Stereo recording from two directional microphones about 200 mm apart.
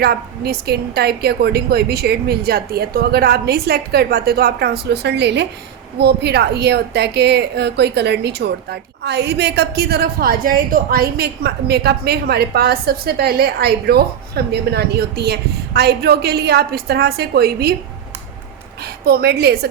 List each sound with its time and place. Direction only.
0.0 s a woman's voice: 50° right (ahead or behind)
19.0 s a woman's voice: 50° right (ahead or behind)